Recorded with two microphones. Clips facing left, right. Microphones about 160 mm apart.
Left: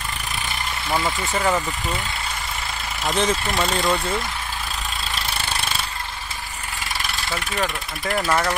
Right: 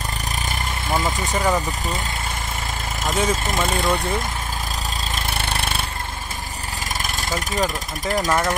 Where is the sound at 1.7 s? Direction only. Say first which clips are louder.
Right 1 dB; 40° right (ahead or behind).